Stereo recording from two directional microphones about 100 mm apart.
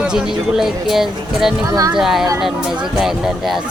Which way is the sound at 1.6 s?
40° right (ahead or behind).